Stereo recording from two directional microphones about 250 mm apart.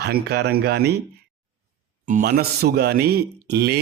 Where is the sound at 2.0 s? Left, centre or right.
Right.